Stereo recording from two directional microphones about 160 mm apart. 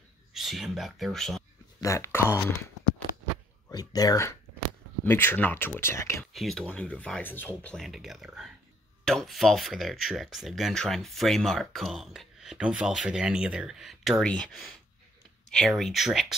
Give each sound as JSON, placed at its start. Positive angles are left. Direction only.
{"t": 0.3, "sound": "speech", "side_deg": 0}
{"t": 1.8, "sound": "speech", "side_deg": 20}
{"t": 3.6, "sound": "speech", "side_deg": 25}
{"t": 6.3, "sound": "speech", "side_deg": 0}